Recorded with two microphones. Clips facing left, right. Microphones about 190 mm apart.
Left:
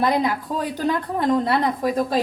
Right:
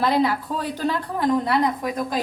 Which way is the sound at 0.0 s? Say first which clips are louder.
Even; 15° left (ahead or behind).